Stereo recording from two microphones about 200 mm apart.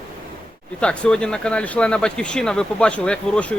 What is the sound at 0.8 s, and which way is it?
Speech, 5° left (ahead or behind).